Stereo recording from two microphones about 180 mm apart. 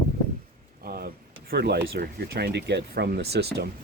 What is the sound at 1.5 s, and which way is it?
Speech, 65° right (ahead or behind).